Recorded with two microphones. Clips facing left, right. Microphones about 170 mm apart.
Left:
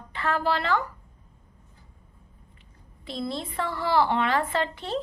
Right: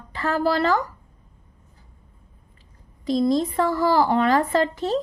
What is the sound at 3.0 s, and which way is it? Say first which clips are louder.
Speech: right 12 dB; 40° right (ahead or behind).